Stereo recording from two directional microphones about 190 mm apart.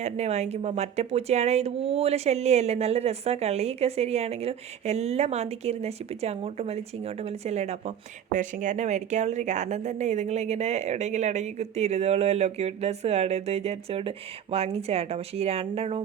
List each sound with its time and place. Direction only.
0.0 s speech: 35° right (ahead or behind)